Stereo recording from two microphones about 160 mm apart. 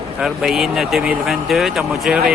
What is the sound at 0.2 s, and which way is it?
Speech, centre (ahead or behind).